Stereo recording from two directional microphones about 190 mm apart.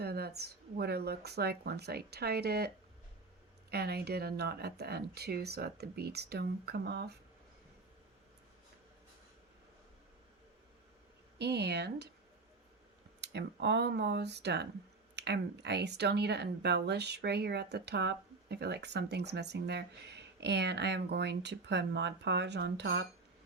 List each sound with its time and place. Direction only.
0.0 s speech: 55° right (ahead or behind)
11.3 s speech: 60° right (ahead or behind)
13.2 s speech: 65° right (ahead or behind)